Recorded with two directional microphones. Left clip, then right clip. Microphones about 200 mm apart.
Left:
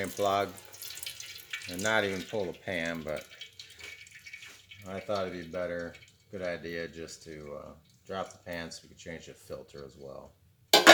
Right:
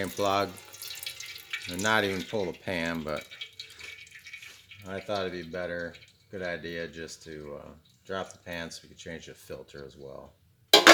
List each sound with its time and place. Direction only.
0.0 s speech: 55° right (ahead or behind)
0.9 s drip: centre (ahead or behind)
1.7 s speech: 55° right (ahead or behind)
4.8 s speech: 45° right (ahead or behind)
10.7 s music: 5° right (ahead or behind)